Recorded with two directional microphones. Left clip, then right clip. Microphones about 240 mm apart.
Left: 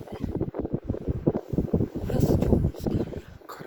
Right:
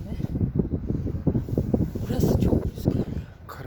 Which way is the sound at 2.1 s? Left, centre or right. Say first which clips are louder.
Even; right.